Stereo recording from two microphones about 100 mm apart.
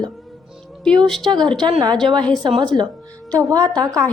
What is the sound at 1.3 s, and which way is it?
Speech, 50° right (ahead or behind).